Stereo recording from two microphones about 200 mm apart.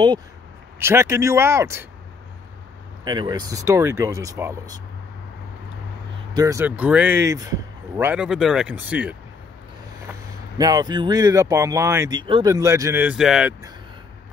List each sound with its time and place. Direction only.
0.7 s speech: 10° right (ahead or behind)
3.1 s speech: 20° right (ahead or behind)
6.3 s speech: 15° right (ahead or behind)
10.6 s speech: 20° right (ahead or behind); by 13.6 s 5° right (ahead or behind)